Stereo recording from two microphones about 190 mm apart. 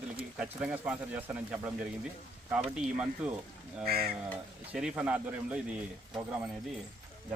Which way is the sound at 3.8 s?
55° right (ahead or behind).